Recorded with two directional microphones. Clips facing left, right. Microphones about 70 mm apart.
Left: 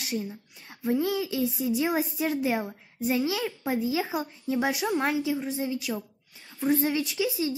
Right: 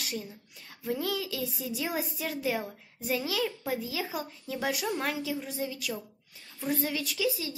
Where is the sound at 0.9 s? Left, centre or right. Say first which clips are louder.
Left 6 dB; centre.